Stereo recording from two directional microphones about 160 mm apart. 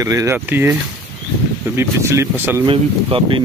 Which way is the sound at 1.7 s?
15° right (ahead or behind).